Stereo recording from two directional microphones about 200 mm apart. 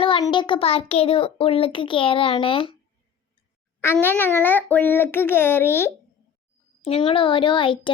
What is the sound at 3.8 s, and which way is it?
A child's voice, 10° left (ahead or behind).